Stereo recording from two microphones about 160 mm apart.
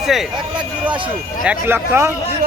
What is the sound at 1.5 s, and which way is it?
Speech, 15° right (ahead or behind).